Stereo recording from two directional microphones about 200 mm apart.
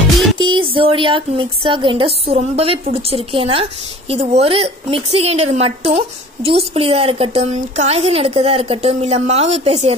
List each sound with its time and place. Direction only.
0.4 s a woman's voice: 25° right (ahead or behind)